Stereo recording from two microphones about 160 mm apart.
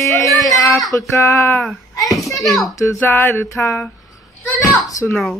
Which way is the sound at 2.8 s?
15° left (ahead or behind).